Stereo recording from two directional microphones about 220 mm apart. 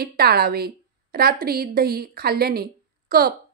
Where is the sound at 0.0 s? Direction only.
45° right (ahead or behind).